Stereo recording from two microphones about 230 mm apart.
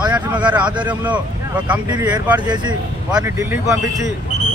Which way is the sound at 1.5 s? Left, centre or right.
Centre.